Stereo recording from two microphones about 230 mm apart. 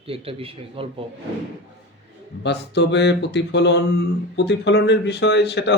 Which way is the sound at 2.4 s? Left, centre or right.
Left.